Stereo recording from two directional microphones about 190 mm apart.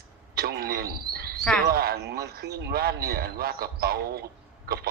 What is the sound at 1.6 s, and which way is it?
A man's voice, 55° right (ahead or behind).